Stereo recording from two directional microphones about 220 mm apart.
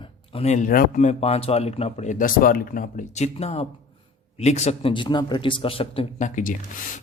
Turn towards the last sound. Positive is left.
turn(degrees=35)  # may be behind; listen again after turning